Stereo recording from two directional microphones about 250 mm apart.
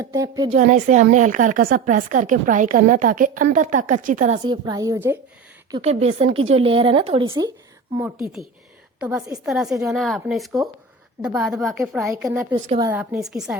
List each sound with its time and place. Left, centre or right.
0.0 s a woman's voice: centre
0.5 s a woman's voice: right
4.4 s a woman's voice: centre
5.7 s a woman's voice: right
9.0 s a woman's voice: centre